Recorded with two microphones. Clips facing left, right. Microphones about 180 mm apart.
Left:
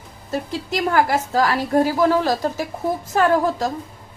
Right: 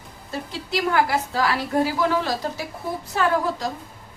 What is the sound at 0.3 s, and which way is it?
A woman's voice, 45° left (ahead or behind).